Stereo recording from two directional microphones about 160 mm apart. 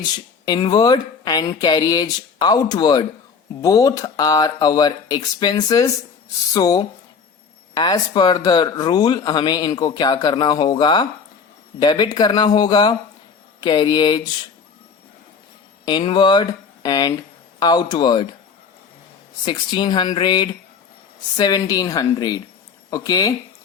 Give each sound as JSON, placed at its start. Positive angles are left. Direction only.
{"t": 0.4, "sound": "speech", "side_deg": 25}
{"t": 15.9, "sound": "speech", "side_deg": 30}
{"t": 19.5, "sound": "speech", "side_deg": 30}